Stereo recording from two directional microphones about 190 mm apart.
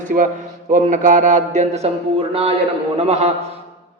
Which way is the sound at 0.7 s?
40° right (ahead or behind).